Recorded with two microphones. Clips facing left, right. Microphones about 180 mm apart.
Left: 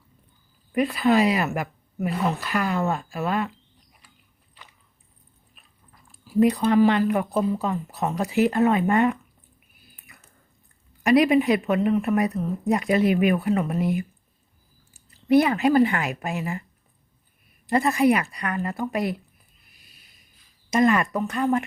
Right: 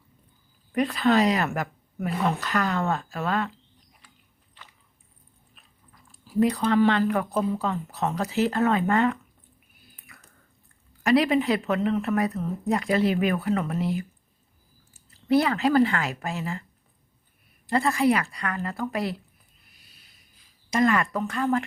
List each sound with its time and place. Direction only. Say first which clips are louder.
0.7 s a woman's voice: left 2 dB; 10° left (ahead or behind)
6.2 s a woman's voice: left 3 dB; 15° left (ahead or behind)
11.0 s a woman's voice: left 3 dB; 15° left (ahead or behind)
17.7 s a woman's voice: left 2 dB; 20° left (ahead or behind)
20.7 s a woman's voice: left 2 dB; 20° left (ahead or behind)